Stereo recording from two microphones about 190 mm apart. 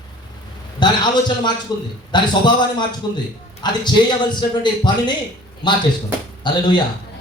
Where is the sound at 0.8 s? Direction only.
25° left (ahead or behind).